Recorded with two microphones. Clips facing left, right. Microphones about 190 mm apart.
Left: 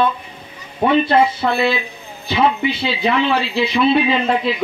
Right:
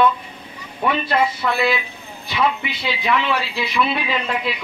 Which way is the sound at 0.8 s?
30° left (ahead or behind).